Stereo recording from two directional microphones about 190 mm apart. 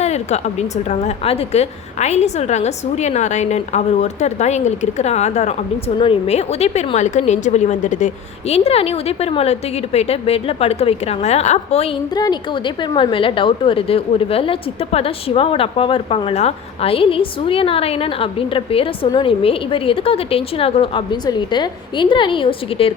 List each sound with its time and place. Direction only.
0.0 s a woman's voice: 35° left (ahead or behind)